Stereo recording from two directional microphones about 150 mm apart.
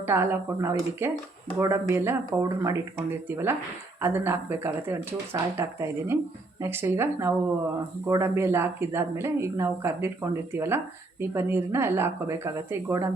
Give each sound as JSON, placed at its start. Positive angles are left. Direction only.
{"t": 0.0, "sound": "a woman's voice", "side_deg": -15}